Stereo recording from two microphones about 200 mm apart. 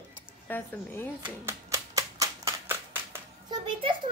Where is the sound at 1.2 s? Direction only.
15° right (ahead or behind).